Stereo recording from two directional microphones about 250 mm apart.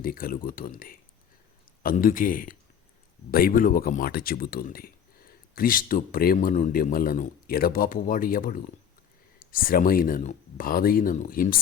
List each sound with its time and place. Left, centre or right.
0.0 s speech: left